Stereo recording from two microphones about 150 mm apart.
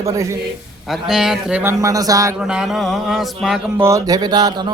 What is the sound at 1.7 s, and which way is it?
Speech, 20° right (ahead or behind).